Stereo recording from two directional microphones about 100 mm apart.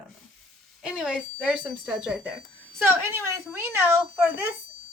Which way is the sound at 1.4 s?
10° right (ahead or behind).